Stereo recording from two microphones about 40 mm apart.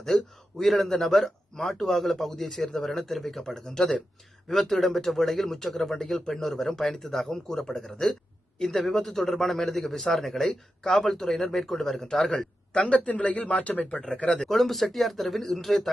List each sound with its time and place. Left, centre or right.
0.1 s speech: centre
0.6 s speech: centre
12.7 s speech: left
13.9 s speech: centre
14.3 s speech: centre